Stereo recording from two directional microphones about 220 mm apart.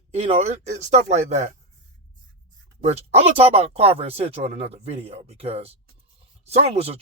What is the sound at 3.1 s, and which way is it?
Speech, 25° right (ahead or behind).